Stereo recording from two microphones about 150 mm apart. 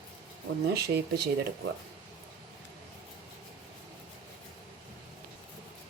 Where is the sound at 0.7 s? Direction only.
90° right.